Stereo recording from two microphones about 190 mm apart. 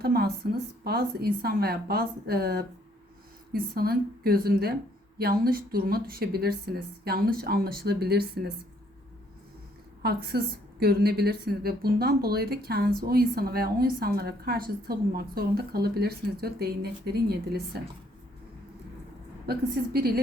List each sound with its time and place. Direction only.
0.0 s a woman's voice: 55° right (ahead or behind)
10.0 s a woman's voice: 55° right (ahead or behind)
19.5 s a woman's voice: 55° right (ahead or behind)